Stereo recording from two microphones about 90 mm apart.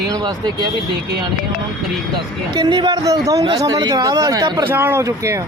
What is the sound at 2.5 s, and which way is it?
Speech, 55° right (ahead or behind).